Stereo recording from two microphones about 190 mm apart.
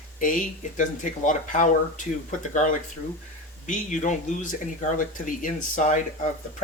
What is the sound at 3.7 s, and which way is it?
Speech, 40° left (ahead or behind).